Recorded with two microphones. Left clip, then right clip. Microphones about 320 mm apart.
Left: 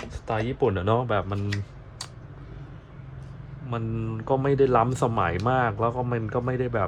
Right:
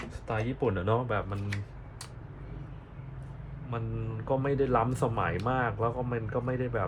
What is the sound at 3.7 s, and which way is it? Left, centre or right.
Speech, left.